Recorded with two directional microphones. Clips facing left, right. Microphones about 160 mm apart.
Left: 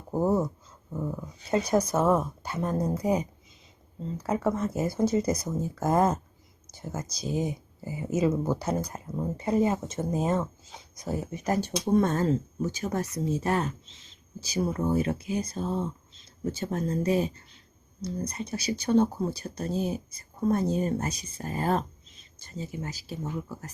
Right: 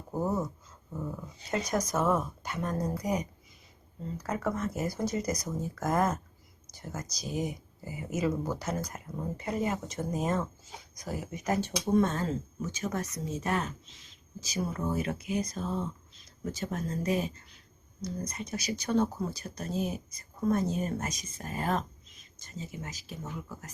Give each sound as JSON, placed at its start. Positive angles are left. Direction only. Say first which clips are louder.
{"t": 0.2, "sound": "speech", "louder": "left 6 dB", "side_deg": 25}
{"t": 11.6, "sound": "speech", "louder": "left 2 dB", "side_deg": 40}